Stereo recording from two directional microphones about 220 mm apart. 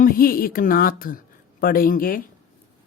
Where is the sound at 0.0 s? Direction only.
40° left (ahead or behind).